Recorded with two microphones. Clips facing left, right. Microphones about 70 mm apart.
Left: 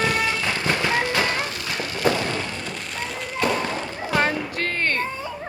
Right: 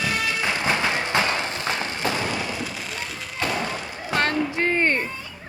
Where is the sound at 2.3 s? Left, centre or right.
Centre.